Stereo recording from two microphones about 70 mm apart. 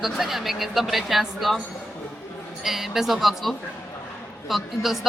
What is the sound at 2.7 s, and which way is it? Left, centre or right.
A woman's voice, centre.